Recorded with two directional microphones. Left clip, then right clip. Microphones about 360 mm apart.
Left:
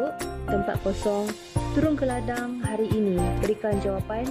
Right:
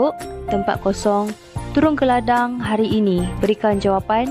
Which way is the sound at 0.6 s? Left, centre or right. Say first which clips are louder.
Right 7 dB; centre.